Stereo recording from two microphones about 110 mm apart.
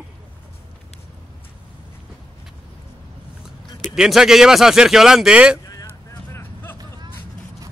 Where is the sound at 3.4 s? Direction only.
5° right (ahead or behind).